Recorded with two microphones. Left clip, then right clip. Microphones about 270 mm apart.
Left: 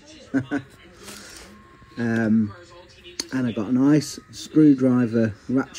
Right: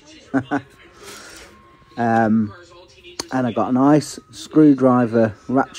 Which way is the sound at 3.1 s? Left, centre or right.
Centre.